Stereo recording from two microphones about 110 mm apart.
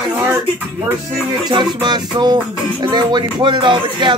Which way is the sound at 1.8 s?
40° right (ahead or behind).